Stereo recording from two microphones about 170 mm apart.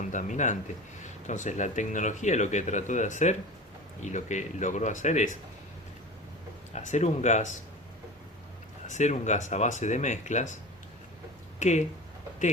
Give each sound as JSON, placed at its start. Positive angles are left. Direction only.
{"t": 0.0, "sound": "speech", "side_deg": 45}
{"t": 6.7, "sound": "speech", "side_deg": 45}
{"t": 8.9, "sound": "speech", "side_deg": 45}
{"t": 11.6, "sound": "speech", "side_deg": 45}